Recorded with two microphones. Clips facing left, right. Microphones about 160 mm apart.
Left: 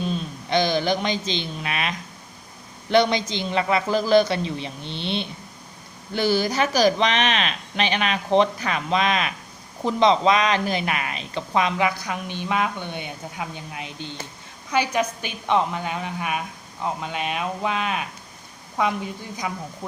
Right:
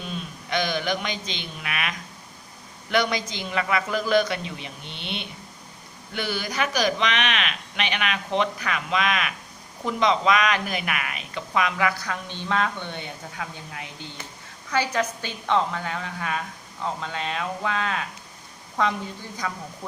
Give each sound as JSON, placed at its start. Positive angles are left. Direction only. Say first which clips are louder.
{"t": 0.1, "sound": "a man's voice", "louder": "left 5 dB", "side_deg": 30}